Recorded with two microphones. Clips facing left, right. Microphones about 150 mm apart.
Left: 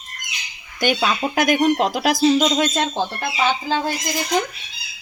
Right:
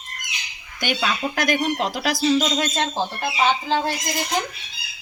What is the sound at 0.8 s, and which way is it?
A woman's voice, 45° left (ahead or behind).